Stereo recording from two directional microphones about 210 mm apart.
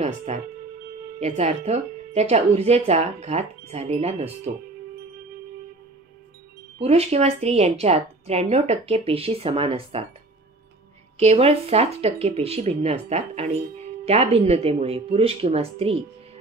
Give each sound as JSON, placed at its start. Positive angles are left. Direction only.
{"t": 0.0, "sound": "speech", "side_deg": -35}
{"t": 6.8, "sound": "a woman's voice", "side_deg": -30}
{"t": 11.1, "sound": "a woman's voice", "side_deg": -30}